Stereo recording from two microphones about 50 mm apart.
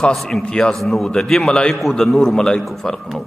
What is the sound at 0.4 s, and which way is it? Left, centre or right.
A man's voice, centre.